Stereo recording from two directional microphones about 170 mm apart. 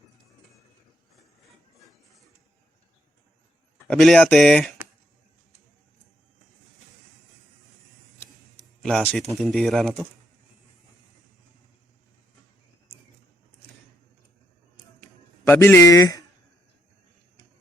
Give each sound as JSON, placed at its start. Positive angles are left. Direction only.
{"t": 3.8, "sound": "speech", "side_deg": 0}
{"t": 8.8, "sound": "speech", "side_deg": 5}
{"t": 15.4, "sound": "speech", "side_deg": 10}